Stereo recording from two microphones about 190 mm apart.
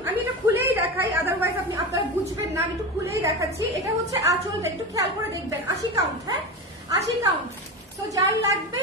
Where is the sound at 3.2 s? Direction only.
15° right (ahead or behind).